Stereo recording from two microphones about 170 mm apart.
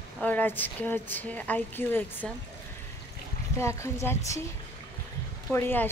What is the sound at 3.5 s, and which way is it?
Speech, 15° left (ahead or behind).